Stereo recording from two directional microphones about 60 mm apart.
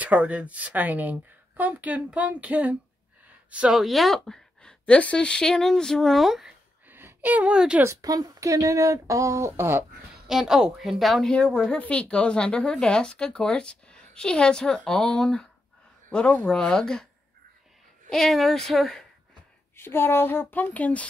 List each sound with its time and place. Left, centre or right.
0.0 s speech: right
3.3 s a sound: right
3.7 s a woman's voice: centre
6.9 s a sound: right; by 7.8 s centre
8.0 s speech: right
9.5 s speech: right
10.2 s a woman's voice: centre
11.3 s a woman's voice: centre
18.1 s a woman's voice: centre
19.8 s speech: left